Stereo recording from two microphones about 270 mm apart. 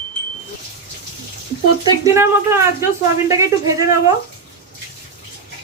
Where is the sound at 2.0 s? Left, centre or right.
Centre.